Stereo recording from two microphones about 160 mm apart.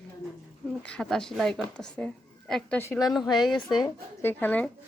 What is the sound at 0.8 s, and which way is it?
A woman's voice, 5° left (ahead or behind).